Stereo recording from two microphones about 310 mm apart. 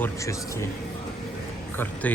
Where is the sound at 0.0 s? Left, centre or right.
Centre.